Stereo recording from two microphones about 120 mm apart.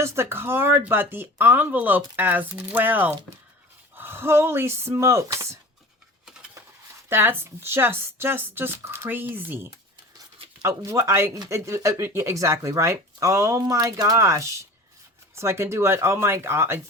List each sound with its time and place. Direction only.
0.0 s speech: 25° right (ahead or behind)
7.1 s speech: 20° right (ahead or behind)